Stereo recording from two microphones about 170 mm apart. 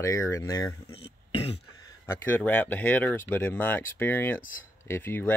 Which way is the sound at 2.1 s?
10° left (ahead or behind).